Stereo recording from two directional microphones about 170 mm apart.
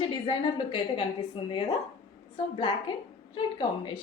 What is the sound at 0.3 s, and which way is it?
A woman's voice, 30° left (ahead or behind).